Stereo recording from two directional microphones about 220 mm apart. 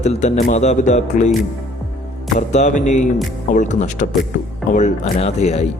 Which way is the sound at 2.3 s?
35° left (ahead or behind).